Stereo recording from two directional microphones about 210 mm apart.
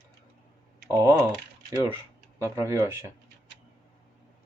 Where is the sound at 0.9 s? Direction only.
15° right (ahead or behind).